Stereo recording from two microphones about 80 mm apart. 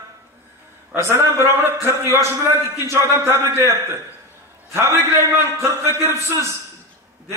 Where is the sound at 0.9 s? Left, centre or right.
Right.